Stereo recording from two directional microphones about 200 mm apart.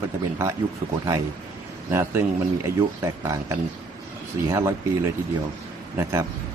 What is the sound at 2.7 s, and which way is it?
Speech, 50° right (ahead or behind).